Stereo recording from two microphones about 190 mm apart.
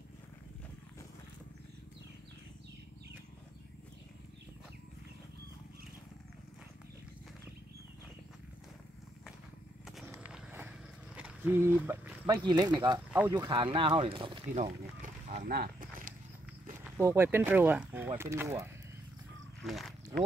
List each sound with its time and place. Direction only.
9.8 s a sound: centre (ahead or behind)
10.1 s vehicle: 10° right (ahead or behind)
11.1 s speech: 10° right (ahead or behind)
12.4 s speech: 20° right (ahead or behind); by 16.2 s 45° right (ahead or behind)
16.8 s speech: 10° right (ahead or behind)
19.6 s speech: centre (ahead or behind)